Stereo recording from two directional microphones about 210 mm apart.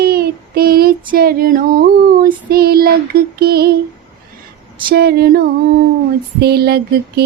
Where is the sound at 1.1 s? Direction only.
45° right (ahead or behind).